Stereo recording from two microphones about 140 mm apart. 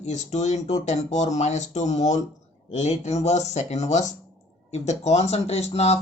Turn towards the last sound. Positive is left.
turn(degrees=50)  # may be behind; listen again after turning